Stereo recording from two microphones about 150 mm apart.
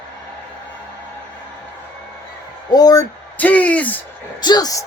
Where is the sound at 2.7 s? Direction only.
25° left (ahead or behind).